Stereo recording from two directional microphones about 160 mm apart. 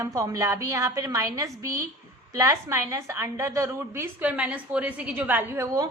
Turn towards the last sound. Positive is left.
turn(degrees=-20)  # may be behind; listen again after turning